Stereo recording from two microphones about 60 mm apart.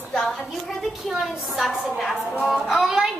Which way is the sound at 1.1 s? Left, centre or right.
Centre.